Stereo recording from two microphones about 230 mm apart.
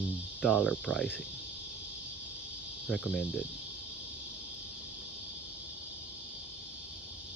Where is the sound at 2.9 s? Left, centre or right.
Centre.